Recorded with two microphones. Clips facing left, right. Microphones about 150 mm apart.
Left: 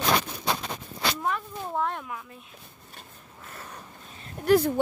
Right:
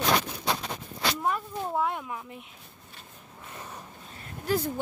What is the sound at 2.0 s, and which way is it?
Speech, 20° right (ahead or behind).